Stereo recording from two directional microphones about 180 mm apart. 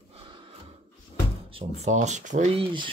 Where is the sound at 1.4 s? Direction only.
35° right (ahead or behind).